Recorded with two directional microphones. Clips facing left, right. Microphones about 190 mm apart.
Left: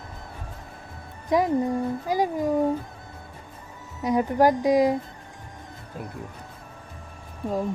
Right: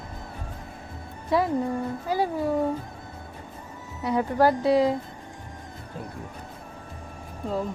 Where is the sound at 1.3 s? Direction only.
15° left (ahead or behind).